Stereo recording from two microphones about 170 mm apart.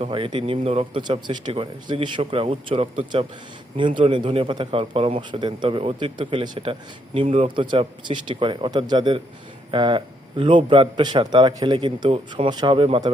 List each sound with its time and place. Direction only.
0.0 s a man's voice: 30° right (ahead or behind)